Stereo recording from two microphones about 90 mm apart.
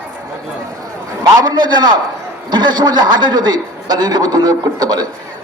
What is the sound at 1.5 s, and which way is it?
A man's voice, 50° right (ahead or behind).